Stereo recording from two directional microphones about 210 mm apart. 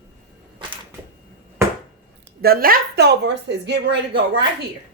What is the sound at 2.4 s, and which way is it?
A woman's voice, 45° right (ahead or behind).